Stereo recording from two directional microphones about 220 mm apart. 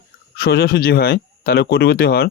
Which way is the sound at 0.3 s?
45° left (ahead or behind).